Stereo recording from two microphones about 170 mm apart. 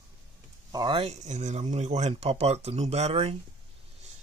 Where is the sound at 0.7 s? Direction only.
25° right (ahead or behind).